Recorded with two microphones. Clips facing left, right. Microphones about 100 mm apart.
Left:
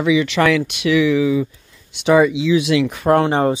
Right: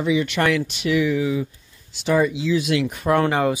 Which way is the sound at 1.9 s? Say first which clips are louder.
Left 6 dB; 75° left (ahead or behind).